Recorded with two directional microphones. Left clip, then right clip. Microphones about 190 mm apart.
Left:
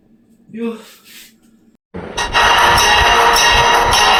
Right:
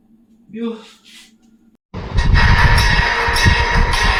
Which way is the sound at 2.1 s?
20° left (ahead or behind).